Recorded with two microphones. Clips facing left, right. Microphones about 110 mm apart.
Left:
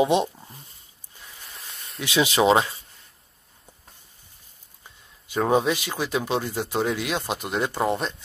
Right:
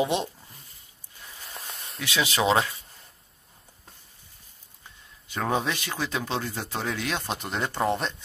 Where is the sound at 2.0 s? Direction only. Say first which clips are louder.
Left 5 dB; 20° left (ahead or behind).